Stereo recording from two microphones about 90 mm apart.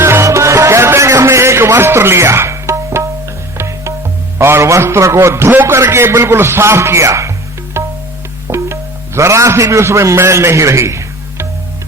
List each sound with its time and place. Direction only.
0.0 s music: 30° right (ahead or behind)
4.4 s a man's voice: 30° right (ahead or behind)